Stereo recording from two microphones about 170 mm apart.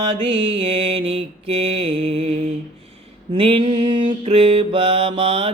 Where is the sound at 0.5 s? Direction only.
35° right (ahead or behind).